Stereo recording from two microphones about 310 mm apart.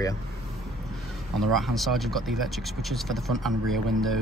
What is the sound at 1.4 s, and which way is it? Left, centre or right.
Speech, centre.